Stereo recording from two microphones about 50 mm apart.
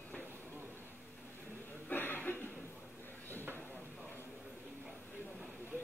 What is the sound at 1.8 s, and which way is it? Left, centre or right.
Chuckle, left.